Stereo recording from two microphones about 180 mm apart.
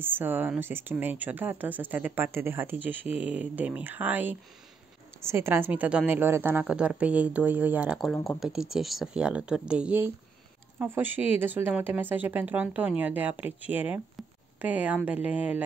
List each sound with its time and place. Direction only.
0.0 s a woman's voice: 10° right (ahead or behind)
8.1 s speech: 10° left (ahead or behind)
8.4 s a woman's voice: 5° right (ahead or behind)
14.1 s a sound: 10° right (ahead or behind)
15.0 s a woman's voice: 10° right (ahead or behind)